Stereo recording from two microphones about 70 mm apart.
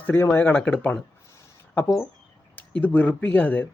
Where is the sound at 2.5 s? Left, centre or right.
Left.